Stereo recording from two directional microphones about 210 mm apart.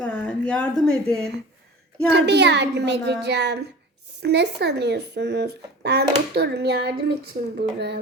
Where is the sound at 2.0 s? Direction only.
55° right (ahead or behind).